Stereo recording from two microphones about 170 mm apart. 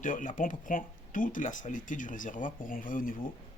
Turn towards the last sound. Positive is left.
turn(degrees=55)  # may be behind; listen again after turning